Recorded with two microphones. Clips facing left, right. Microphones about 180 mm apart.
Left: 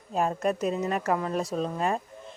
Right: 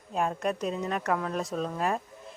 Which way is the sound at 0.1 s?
Centre (ahead or behind).